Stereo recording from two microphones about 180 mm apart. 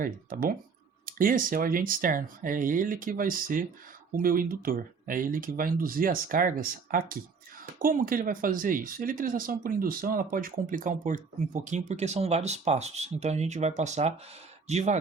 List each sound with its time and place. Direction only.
0.0 s speech: 50° right (ahead or behind)